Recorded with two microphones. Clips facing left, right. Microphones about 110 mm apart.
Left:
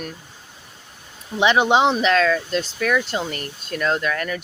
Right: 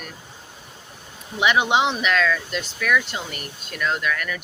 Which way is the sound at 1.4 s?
30° left (ahead or behind).